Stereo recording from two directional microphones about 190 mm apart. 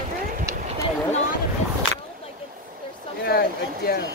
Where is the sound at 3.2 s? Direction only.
55° left (ahead or behind).